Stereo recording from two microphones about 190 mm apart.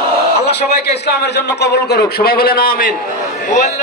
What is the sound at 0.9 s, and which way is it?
A man's voice, 60° left (ahead or behind).